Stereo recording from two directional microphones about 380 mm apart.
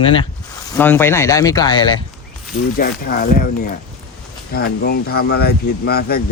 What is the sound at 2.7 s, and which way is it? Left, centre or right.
Speech, left.